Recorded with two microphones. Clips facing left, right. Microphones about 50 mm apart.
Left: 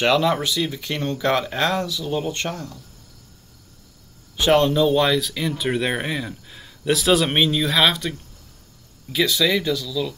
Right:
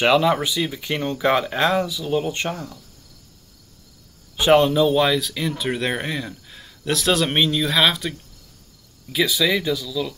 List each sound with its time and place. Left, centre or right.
0.0 s speech: centre
4.4 s speech: centre
9.1 s speech: centre